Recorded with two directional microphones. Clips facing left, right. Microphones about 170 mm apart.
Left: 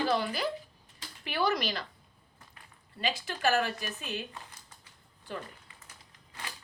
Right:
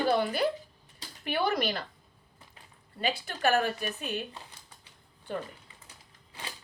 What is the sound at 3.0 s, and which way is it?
A woman's voice, 55° right (ahead or behind).